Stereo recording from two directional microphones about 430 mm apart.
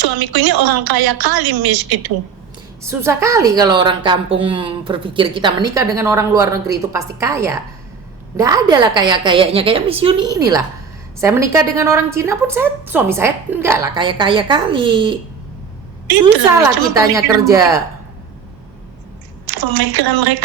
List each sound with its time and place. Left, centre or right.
0.0 s a woman's voice: right
2.8 s a woman's voice: centre
16.2 s a woman's voice: centre
19.5 s a woman's voice: right